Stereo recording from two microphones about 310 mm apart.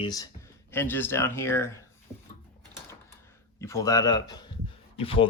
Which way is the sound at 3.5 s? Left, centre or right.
Centre.